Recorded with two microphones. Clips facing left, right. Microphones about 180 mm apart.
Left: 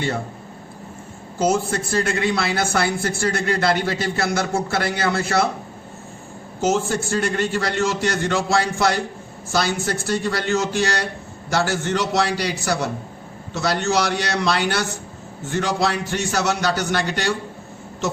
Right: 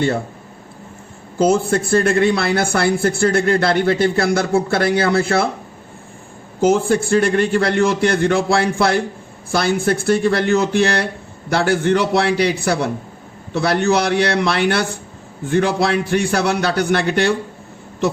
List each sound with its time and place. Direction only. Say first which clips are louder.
1.5 s a man's voice: right 4 dB; 55° right (ahead or behind)
6.6 s a man's voice: right 6 dB; 55° right (ahead or behind)